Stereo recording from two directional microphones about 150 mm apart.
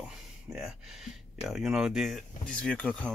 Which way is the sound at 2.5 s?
5° left (ahead or behind).